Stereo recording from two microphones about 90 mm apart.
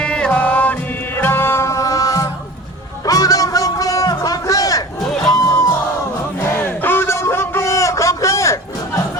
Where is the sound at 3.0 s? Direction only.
40° left (ahead or behind).